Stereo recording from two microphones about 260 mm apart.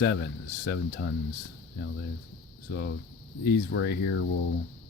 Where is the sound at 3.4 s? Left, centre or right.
Left.